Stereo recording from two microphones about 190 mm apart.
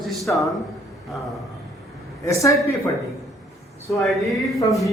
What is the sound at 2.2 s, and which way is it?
Speech, 15° left (ahead or behind).